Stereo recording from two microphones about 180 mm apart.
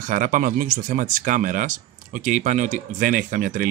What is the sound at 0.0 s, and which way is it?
Speech, 45° right (ahead or behind).